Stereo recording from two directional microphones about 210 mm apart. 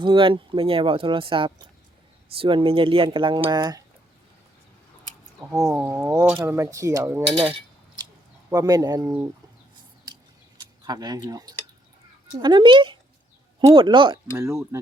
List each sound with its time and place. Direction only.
0.0 s speech: 25° right (ahead or behind)
5.5 s speech: 15° right (ahead or behind)
8.4 s speech: 15° right (ahead or behind)
10.6 s speech: 20° right (ahead or behind)
14.3 s speech: 15° right (ahead or behind)